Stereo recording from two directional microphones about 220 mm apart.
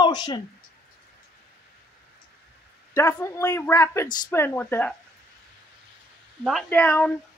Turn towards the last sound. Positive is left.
turn(degrees=5)  # may be behind; listen again after turning